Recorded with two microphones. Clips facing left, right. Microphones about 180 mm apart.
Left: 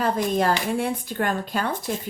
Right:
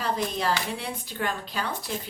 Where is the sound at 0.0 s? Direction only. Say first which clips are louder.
Left 6 dB; 50° left (ahead or behind).